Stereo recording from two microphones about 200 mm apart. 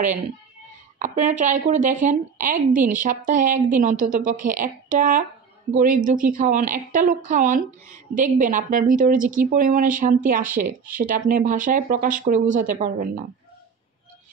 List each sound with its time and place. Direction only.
0.9 s a woman's voice: 40° right (ahead or behind)